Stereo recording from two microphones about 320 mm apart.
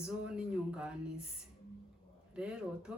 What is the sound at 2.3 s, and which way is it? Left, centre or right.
Speech, centre.